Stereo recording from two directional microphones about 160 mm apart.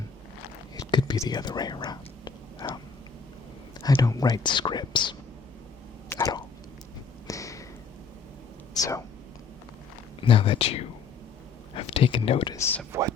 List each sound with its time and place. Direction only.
0.8 s whispering: 30° left (ahead or behind)
3.8 s speech: 25° left (ahead or behind)
6.1 s a sound: 15° left (ahead or behind)
8.8 s speech: 20° left (ahead or behind)
10.2 s speech: 35° left (ahead or behind)
12.5 s speech: 15° left (ahead or behind)
12.9 s speech: 20° right (ahead or behind)